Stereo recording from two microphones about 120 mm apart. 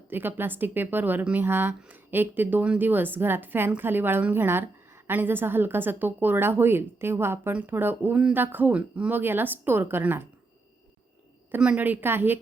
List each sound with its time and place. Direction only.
0.1 s speech: 15° right (ahead or behind)
11.5 s speech: 10° right (ahead or behind)